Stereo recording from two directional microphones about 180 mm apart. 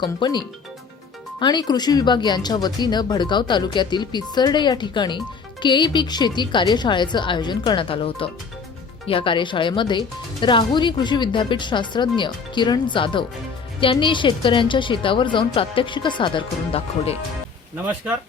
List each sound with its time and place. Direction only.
0.0 s speech: 25° left (ahead or behind)